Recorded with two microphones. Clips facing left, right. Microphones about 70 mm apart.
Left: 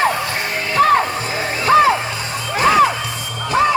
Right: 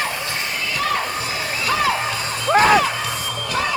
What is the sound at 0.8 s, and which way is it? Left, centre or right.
Music, left.